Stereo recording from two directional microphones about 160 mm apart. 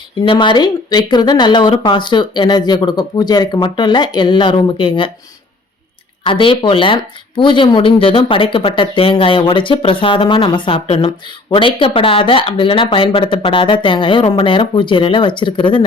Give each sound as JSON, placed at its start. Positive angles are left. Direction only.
{"t": 0.2, "sound": "speech", "side_deg": 30}
{"t": 6.2, "sound": "speech", "side_deg": 30}